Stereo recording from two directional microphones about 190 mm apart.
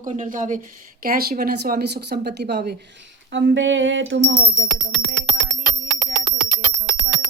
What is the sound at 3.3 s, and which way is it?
Coin, 75° right (ahead or behind).